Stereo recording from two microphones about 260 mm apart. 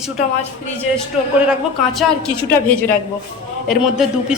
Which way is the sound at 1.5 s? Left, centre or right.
Centre.